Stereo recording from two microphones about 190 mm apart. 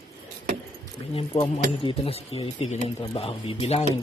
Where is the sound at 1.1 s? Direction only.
30° left (ahead or behind).